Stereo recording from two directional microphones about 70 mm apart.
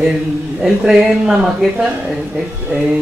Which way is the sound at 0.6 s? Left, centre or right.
Centre.